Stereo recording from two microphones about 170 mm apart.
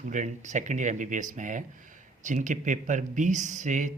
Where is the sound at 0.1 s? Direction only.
45° right (ahead or behind).